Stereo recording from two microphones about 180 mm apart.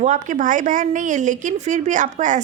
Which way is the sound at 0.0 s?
45° right (ahead or behind).